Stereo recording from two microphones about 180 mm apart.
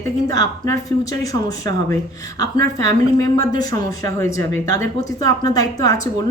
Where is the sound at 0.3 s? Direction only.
20° left (ahead or behind).